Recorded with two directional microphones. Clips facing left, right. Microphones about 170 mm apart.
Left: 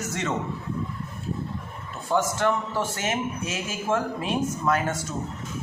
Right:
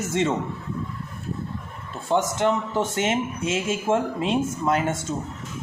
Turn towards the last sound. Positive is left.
turn(degrees=-25)  # may be behind; listen again after turning